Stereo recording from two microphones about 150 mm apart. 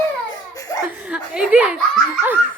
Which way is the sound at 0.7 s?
20° left (ahead or behind).